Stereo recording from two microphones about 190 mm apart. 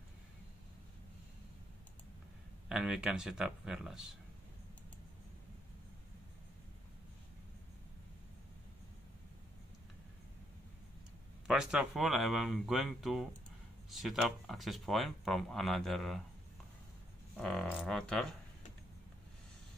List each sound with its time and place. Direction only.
2.7 s speech: centre (ahead or behind)
11.4 s speech: 5° right (ahead or behind)
17.4 s speech: 5° left (ahead or behind)